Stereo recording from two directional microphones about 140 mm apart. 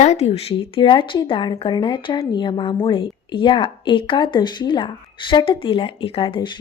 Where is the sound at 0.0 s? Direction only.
50° left (ahead or behind).